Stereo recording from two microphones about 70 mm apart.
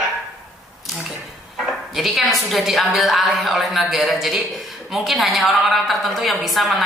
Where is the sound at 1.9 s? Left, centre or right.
Centre.